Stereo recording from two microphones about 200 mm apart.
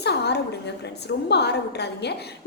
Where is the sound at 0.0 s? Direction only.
55° left (ahead or behind).